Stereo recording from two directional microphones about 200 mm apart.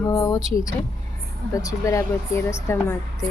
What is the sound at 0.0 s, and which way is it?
A woman's voice, 15° left (ahead or behind).